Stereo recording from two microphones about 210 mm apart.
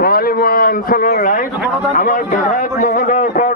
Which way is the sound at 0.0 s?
45° left (ahead or behind).